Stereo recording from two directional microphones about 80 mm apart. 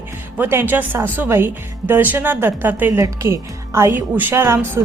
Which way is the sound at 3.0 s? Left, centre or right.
Right.